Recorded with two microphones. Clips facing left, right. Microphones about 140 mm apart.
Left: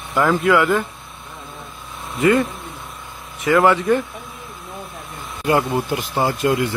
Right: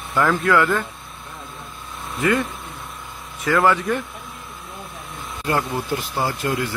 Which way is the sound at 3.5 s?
Centre (ahead or behind).